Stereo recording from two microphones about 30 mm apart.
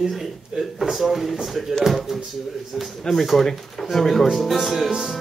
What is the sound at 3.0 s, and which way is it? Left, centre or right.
A man's voice, centre.